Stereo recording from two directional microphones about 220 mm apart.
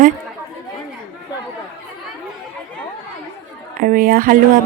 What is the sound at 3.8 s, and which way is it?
Speech, 40° right (ahead or behind).